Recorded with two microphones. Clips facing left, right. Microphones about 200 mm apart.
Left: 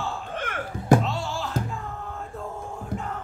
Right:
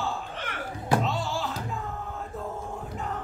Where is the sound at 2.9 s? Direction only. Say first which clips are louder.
Left 7 dB; 50° left (ahead or behind).